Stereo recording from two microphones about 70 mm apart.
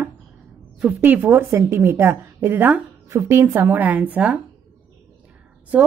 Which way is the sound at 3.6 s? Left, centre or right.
Right.